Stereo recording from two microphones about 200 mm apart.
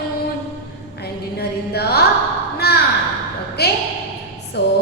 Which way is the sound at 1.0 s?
55° left (ahead or behind).